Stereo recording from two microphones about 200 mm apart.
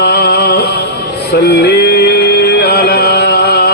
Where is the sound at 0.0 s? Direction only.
55° left (ahead or behind).